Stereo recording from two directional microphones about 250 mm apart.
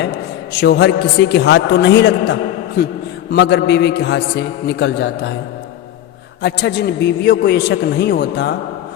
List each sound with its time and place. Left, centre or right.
0.6 s a man's voice: left
6.4 s a man's voice: left